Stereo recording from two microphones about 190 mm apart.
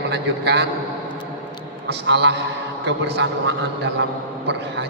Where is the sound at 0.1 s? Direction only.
65° right (ahead or behind).